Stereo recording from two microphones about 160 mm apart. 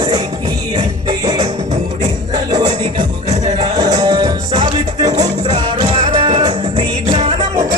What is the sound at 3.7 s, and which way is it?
Music, 20° right (ahead or behind).